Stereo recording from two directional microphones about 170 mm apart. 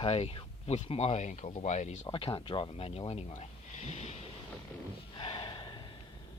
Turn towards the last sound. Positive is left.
turn(degrees=30)  # may be behind; listen again after turning